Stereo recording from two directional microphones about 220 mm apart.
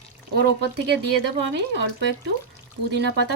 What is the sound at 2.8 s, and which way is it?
Speech, 50° right (ahead or behind).